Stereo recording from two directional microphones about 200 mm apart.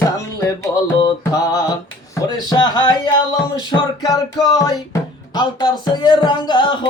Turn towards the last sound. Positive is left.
turn(degrees=20)  # may be behind; listen again after turning